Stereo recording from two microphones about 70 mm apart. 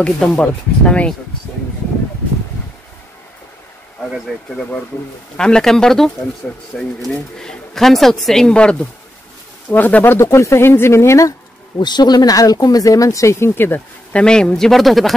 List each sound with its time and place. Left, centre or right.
0.0 s speech: centre
4.3 s speech: centre; by 10.1 s left
10.1 s speech: left
11.8 s speech: left
14.1 s speech: centre